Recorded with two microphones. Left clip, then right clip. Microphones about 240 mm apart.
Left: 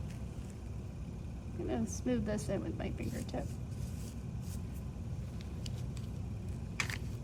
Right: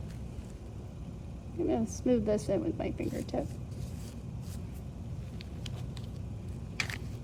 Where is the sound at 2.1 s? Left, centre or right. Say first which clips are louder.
Right 8 dB; right.